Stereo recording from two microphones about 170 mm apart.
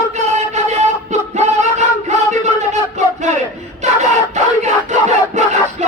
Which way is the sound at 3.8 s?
45° right (ahead or behind).